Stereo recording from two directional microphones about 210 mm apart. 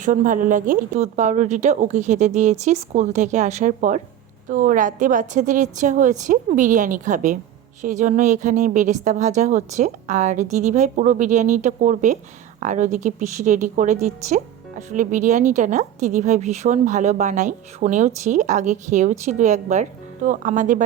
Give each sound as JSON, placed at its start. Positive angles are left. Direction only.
{"t": 0.0, "sound": "a woman's voice", "side_deg": -40}